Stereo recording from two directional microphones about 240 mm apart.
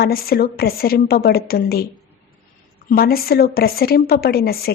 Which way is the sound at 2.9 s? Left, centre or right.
Left.